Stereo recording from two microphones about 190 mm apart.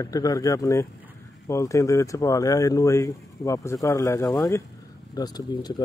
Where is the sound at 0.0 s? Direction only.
20° left (ahead or behind).